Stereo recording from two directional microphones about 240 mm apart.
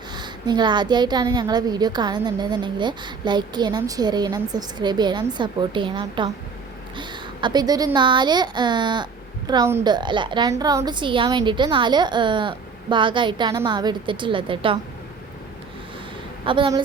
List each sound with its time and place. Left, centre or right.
0.1 s a woman's voice: centre
16.5 s a woman's voice: centre